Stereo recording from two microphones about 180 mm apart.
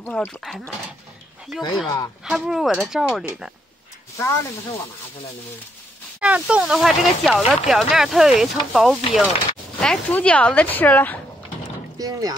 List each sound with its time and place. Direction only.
0.0 s speech: 5° left (ahead or behind)
1.6 s speech: 25° left (ahead or behind)
2.2 s speech: centre (ahead or behind)
4.2 s speech: 15° left (ahead or behind)
6.2 s speech: 5° right (ahead or behind); by 11.1 s 10° left (ahead or behind)
12.0 s speech: 20° right (ahead or behind)